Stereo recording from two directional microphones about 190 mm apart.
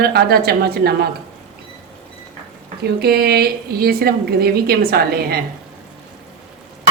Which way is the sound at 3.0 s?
55° right (ahead or behind).